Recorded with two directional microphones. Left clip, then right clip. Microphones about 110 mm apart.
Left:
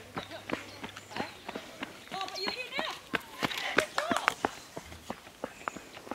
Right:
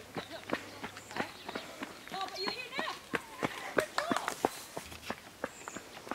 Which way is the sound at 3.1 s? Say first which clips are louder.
Left 3 dB; 30° left (ahead or behind).